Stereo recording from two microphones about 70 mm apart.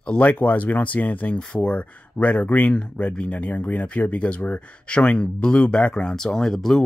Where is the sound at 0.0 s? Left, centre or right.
Centre.